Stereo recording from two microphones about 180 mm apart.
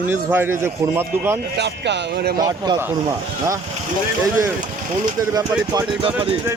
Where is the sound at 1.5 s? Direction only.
70° right (ahead or behind).